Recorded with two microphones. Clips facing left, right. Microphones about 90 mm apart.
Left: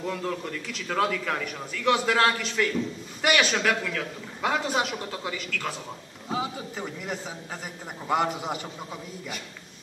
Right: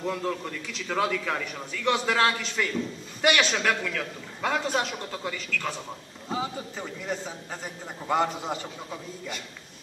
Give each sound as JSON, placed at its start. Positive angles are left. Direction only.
{"t": 0.0, "sound": "a man's voice", "side_deg": -5}